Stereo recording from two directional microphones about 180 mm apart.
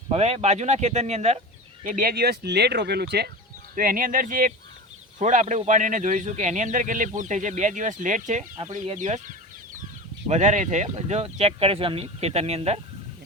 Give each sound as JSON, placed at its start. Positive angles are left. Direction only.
{"t": 0.1, "sound": "speech", "side_deg": -35}
{"t": 1.8, "sound": "speech", "side_deg": -50}
{"t": 3.8, "sound": "a man's voice", "side_deg": -50}